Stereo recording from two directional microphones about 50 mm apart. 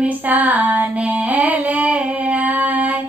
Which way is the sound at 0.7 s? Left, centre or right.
Right.